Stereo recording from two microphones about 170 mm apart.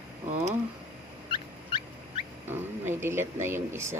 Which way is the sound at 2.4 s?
15° right (ahead or behind).